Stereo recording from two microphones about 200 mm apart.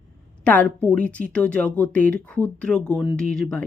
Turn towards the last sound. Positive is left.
turn(degrees=5)  # may be behind; listen again after turning